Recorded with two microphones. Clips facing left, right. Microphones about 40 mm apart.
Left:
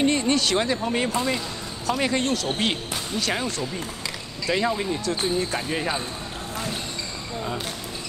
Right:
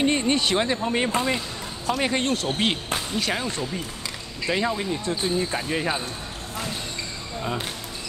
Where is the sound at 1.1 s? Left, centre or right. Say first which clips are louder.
Right 1 dB; right.